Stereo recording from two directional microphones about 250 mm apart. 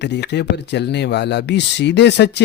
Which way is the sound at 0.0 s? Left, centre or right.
Left.